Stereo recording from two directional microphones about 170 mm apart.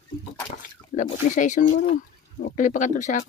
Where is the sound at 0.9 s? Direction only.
45° left (ahead or behind).